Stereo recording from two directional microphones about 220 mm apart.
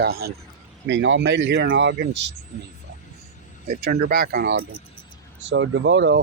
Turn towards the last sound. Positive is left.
turn(degrees=-55)  # may be behind; listen again after turning